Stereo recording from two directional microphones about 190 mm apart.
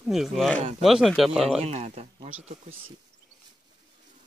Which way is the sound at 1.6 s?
35° right (ahead or behind).